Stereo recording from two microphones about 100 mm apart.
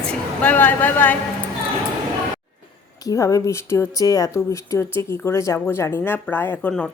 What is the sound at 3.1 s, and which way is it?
Speech, 35° left (ahead or behind).